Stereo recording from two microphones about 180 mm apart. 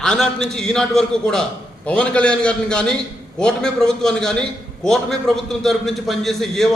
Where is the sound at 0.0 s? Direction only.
5° left (ahead or behind).